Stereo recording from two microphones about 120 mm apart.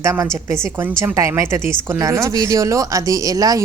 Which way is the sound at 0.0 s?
20° right (ahead or behind).